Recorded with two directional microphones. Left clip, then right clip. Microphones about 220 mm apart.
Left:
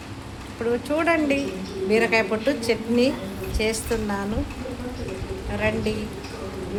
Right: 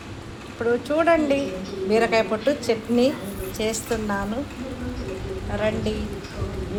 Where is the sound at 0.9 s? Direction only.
5° left (ahead or behind).